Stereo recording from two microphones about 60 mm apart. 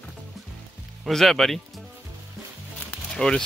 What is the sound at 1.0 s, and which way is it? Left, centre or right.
Speech, centre.